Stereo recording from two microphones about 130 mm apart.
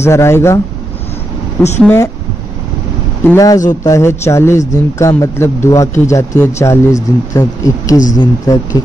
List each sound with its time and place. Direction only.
0.0 s a man's voice: 20° left (ahead or behind)
1.6 s speech: 15° left (ahead or behind)
3.3 s a man's voice: 25° left (ahead or behind)